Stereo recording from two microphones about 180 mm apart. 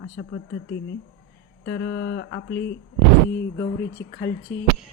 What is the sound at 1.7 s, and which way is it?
Mantra, 85° left.